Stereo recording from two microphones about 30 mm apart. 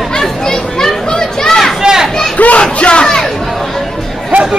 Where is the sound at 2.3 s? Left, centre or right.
Left.